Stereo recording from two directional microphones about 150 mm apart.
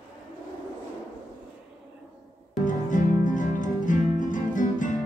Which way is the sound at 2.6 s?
60° left (ahead or behind).